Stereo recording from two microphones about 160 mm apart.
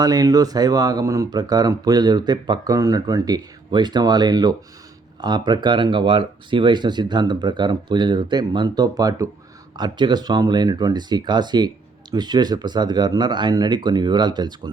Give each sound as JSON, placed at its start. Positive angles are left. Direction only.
{"t": 0.0, "sound": "speech", "side_deg": -25}